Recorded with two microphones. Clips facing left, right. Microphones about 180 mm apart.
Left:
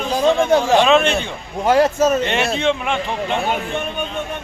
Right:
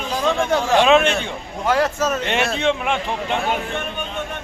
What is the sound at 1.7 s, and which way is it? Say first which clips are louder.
Speech: left 5 dB; 20° left (ahead or behind).